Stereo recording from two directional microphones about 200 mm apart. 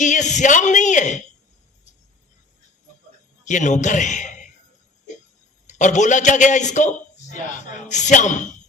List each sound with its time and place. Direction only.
0.0 s a man's voice: 40° left (ahead or behind)
3.4 s a man's voice: 40° left (ahead or behind)
5.6 s a man's voice: 35° left (ahead or behind)